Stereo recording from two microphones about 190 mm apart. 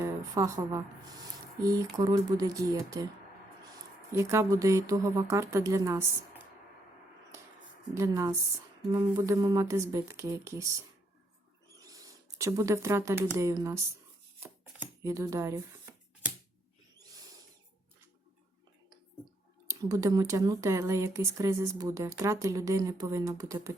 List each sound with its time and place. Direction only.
0.0 s speech: 15° right (ahead or behind)
4.1 s speech: 15° right (ahead or behind)
7.9 s speech: 20° right (ahead or behind)
11.7 s speech: 20° right (ahead or behind)
14.4 s a sound: 15° right (ahead or behind)
19.6 s speech: 15° right (ahead or behind)